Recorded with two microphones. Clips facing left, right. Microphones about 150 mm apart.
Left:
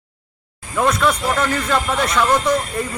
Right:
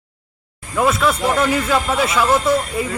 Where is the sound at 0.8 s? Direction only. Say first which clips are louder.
Right 1 dB; 5° right (ahead or behind).